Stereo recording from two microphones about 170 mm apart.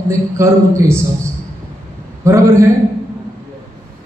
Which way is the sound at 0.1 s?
15° right (ahead or behind).